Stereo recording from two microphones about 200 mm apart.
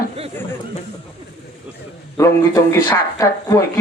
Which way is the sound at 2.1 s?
15° left (ahead or behind).